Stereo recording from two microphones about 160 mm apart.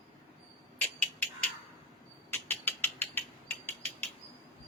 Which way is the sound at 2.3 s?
15° left (ahead or behind).